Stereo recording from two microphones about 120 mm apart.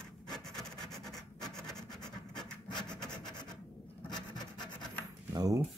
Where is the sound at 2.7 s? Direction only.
35° left (ahead or behind).